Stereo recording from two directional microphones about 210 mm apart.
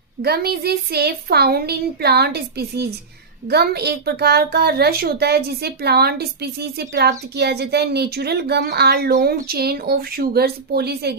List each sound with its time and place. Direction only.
0.2 s speech: 50° right (ahead or behind)